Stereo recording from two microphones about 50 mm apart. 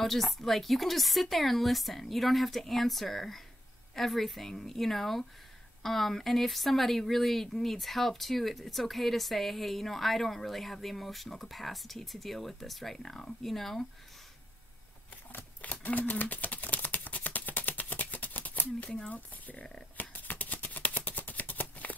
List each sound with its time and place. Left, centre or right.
0.0 s speech: centre
15.3 s a sound: left
18.9 s speech: left
19.1 s speech: left
20.0 s shuffling cards: left